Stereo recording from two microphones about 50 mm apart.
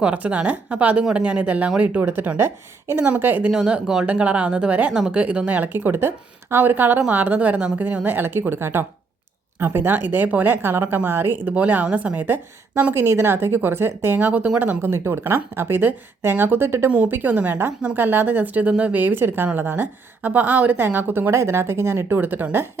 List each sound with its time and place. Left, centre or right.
0.0 s a woman's voice: right
2.0 s speech: right
3.0 s a woman's voice: right
4.0 s a woman's voice: right
5.6 s speech: right
7.1 s a woman's voice: right
11.5 s a woman's voice: right
12.9 s speech: right
14.2 s a woman's voice: right
14.6 s speech: right
15.9 s speech: right
17.1 s a woman's voice: right
21.3 s speech: right
22.2 s a woman's voice: right